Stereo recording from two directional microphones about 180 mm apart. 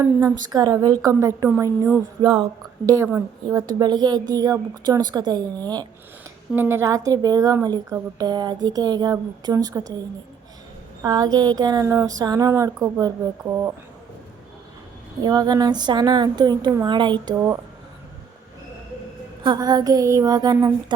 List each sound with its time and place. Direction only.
0.0 s a woman's voice: 10° right (ahead or behind)
2.2 s a woman's voice: 30° right (ahead or behind)
2.9 s a woman's voice: 20° right (ahead or behind)
11.0 s a woman's voice: 20° right (ahead or behind)
15.2 s a woman's voice: 20° right (ahead or behind)
19.4 s a woman's voice: 25° right (ahead or behind)